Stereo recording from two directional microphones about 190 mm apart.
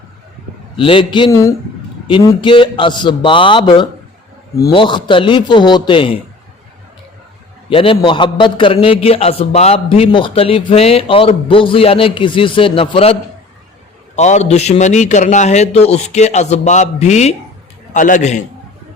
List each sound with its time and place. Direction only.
0.8 s a man's voice: 25° left (ahead or behind)
7.7 s a man's voice: 30° left (ahead or behind)
14.2 s a man's voice: 35° left (ahead or behind)